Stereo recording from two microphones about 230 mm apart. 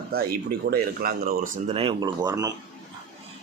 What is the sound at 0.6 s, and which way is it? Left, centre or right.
Speech, right.